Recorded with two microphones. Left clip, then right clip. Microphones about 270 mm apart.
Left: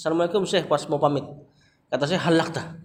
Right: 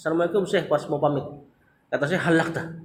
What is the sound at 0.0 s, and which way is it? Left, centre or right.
A man's voice, left.